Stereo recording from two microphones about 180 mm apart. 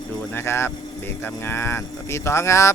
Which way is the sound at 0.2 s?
10° left (ahead or behind).